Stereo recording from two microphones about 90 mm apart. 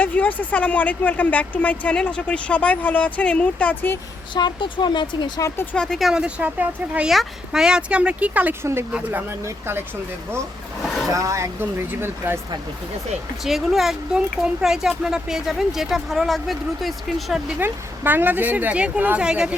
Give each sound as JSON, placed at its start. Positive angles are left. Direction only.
{"t": 0.0, "sound": "speech", "side_deg": 20}
{"t": 4.4, "sound": "speech", "side_deg": 55}
{"t": 5.7, "sound": "speech", "side_deg": 5}
{"t": 7.1, "sound": "speech", "side_deg": -5}
{"t": 10.8, "sound": "vehicle", "side_deg": 5}
{"t": 11.1, "sound": "speech", "side_deg": -35}
{"t": 13.4, "sound": "speech", "side_deg": -5}
{"t": 17.6, "sound": "speech", "side_deg": -25}